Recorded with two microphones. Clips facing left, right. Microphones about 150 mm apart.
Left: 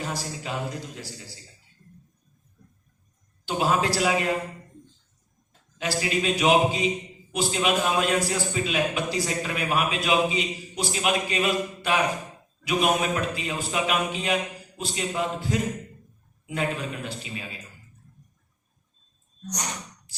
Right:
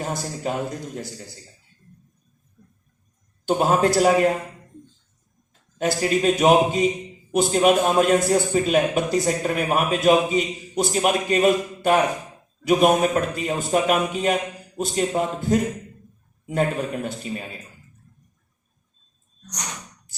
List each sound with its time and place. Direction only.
0.0 s a man's voice: 45° right (ahead or behind)
3.4 s a man's voice: 50° right (ahead or behind)
5.7 s a man's voice: 45° right (ahead or behind)